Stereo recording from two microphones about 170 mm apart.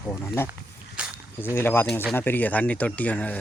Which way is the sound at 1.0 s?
5° right (ahead or behind).